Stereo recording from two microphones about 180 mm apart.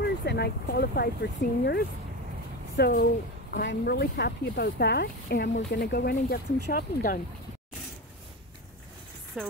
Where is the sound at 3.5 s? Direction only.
80° left; by 7.2 s 55° left (ahead or behind).